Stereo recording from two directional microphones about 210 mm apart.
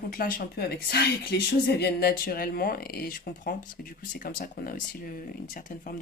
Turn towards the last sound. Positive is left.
turn(degrees=40)  # may be behind; listen again after turning